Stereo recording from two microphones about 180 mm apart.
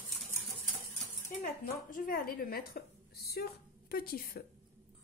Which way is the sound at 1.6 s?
50° left (ahead or behind).